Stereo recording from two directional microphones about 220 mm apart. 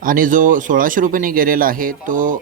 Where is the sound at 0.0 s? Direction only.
40° right (ahead or behind).